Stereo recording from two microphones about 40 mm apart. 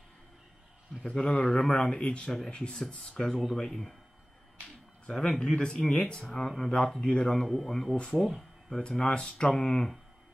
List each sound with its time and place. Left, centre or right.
1.0 s speech: left
1.4 s speech: centre
5.0 s speech: centre
7.4 s speech: centre
8.2 s speech: centre
8.8 s speech: left